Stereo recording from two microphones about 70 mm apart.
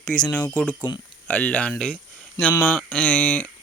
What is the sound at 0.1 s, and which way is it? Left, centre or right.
Speech, centre.